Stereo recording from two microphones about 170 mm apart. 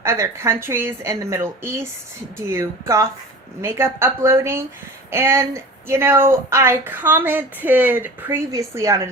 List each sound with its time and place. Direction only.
0.0 s speech: 15° right (ahead or behind)